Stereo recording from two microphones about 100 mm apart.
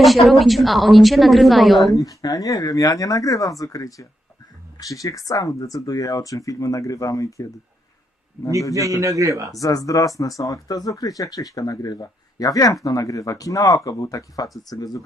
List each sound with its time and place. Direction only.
0.0 s a woman's voice: centre (ahead or behind)
2.0 s speech: 35° left (ahead or behind)
9.0 s a man's voice: 35° right (ahead or behind)
9.5 s speech: 35° left (ahead or behind)